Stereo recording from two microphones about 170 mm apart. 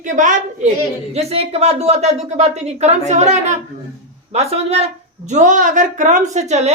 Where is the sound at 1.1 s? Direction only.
35° right (ahead or behind).